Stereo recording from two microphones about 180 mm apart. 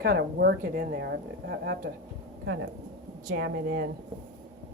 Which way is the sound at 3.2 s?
70° right (ahead or behind).